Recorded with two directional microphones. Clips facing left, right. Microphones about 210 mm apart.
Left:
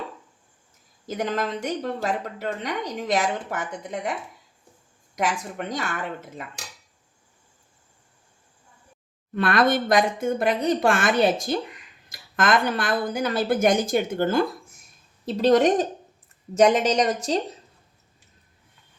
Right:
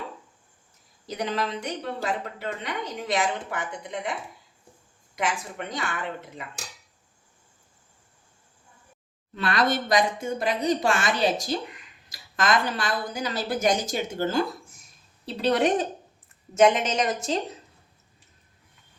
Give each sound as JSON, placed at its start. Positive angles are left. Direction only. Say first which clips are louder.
{"t": 1.0, "sound": "speech", "louder": "left 2 dB", "side_deg": 45}
{"t": 5.1, "sound": "speech", "louder": "left 3 dB", "side_deg": 40}
{"t": 9.3, "sound": "speech", "louder": "left 4 dB", "side_deg": 55}
{"t": 15.3, "sound": "a woman's voice", "louder": "left 5 dB", "side_deg": 45}